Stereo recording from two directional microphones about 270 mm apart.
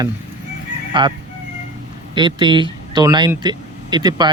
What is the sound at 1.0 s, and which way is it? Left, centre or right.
Speech, centre.